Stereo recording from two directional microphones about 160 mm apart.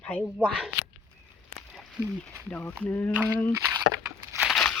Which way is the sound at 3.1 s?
10° right (ahead or behind).